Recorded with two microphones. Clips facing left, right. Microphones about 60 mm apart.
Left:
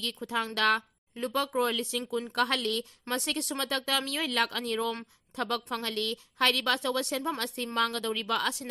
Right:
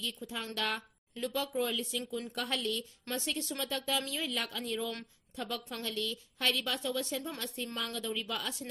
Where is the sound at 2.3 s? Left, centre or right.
Left.